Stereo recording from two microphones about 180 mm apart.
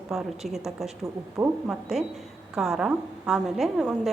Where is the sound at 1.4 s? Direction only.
20° right (ahead or behind).